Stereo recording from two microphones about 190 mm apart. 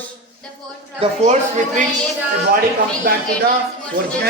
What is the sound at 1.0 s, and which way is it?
Speech, 35° right (ahead or behind).